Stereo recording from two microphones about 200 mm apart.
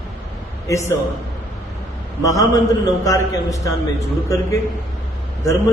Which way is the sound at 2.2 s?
15° left (ahead or behind).